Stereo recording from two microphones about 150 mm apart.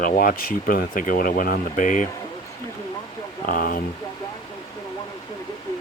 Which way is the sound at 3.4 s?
70° left (ahead or behind).